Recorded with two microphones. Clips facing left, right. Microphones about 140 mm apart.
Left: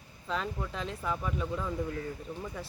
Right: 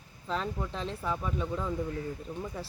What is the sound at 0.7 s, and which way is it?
Speech, 35° right (ahead or behind).